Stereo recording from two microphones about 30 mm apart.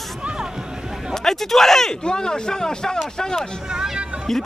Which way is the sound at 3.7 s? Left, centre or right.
Centre.